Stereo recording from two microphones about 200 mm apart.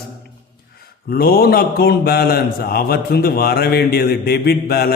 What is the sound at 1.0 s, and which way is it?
A man's voice, 50° left (ahead or behind).